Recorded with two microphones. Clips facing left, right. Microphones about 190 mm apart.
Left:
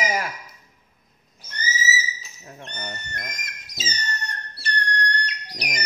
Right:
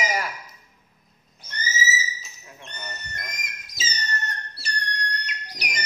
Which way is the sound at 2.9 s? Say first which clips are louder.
Left 3 dB; centre (ahead or behind).